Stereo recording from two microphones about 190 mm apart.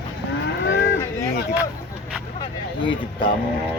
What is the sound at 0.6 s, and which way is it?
Moo, 65° left (ahead or behind).